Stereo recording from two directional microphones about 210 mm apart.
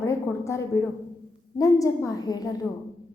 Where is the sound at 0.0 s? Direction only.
15° left (ahead or behind).